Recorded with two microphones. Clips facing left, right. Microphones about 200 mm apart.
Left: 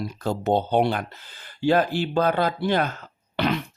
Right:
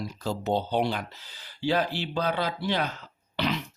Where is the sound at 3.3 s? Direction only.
55° left (ahead or behind).